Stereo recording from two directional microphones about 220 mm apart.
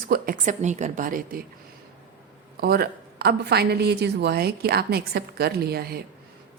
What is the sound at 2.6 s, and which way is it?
A woman's voice, 45° right (ahead or behind).